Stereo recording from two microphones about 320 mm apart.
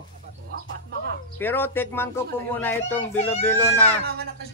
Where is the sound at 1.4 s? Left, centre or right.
Centre.